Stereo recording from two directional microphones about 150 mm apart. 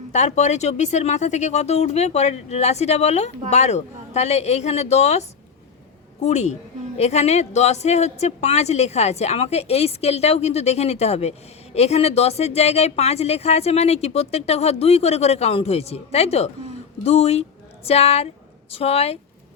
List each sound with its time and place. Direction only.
0.1 s a woman's voice: 50° left (ahead or behind)
6.2 s a woman's voice: 50° left (ahead or behind)